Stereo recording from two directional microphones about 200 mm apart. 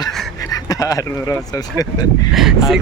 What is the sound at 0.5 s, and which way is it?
Speech, 20° left (ahead or behind).